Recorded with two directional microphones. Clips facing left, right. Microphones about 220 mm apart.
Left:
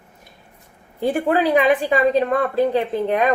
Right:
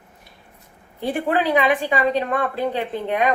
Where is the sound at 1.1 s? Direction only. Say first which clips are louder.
Left 2 dB; 40° left (ahead or behind).